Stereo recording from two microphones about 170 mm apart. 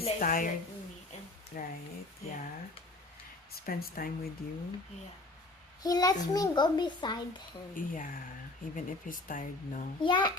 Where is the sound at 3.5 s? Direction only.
60° left (ahead or behind).